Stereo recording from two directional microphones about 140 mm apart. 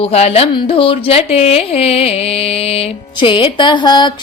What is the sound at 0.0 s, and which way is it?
Speech, 45° left (ahead or behind).